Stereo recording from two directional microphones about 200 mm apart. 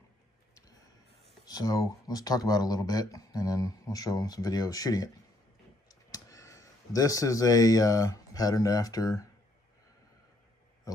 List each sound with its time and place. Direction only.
1.4 s speech: 20° left (ahead or behind)